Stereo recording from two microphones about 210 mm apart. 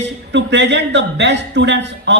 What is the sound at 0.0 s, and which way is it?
A man's voice, 55° right (ahead or behind).